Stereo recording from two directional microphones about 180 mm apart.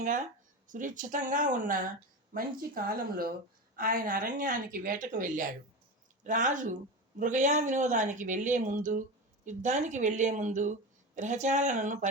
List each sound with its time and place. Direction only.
0.0 s a woman's voice: 45° right (ahead or behind)